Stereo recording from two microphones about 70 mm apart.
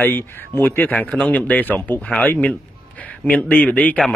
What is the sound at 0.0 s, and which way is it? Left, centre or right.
Speech, left.